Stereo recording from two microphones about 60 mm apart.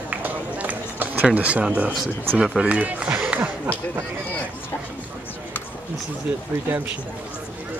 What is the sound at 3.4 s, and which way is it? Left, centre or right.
Speech, right.